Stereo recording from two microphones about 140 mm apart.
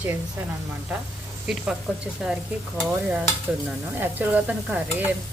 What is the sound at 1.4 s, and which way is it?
Stir, 5° right (ahead or behind).